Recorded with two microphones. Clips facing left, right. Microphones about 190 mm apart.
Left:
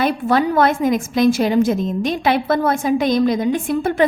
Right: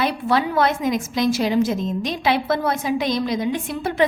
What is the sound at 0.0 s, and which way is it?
A woman's voice, 50° left (ahead or behind).